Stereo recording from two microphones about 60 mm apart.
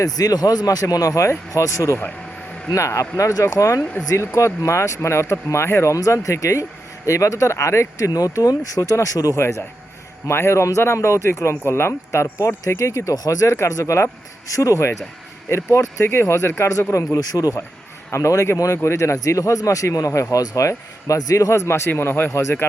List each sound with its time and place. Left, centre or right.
0.0 s speech: left
1.3 s speech: left
5.9 s speech: left
9.4 s speech: left
13.6 s speech: left
16.0 s speech: left
18.1 s speech: left
21.7 s a man's voice: left
22.3 s speech: left